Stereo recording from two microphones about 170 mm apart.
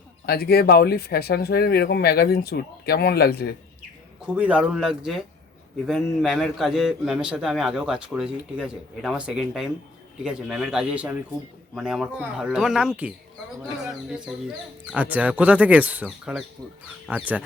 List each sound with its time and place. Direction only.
0.3 s speech: 65° left (ahead or behind)
4.4 s a man's voice: 5° right (ahead or behind)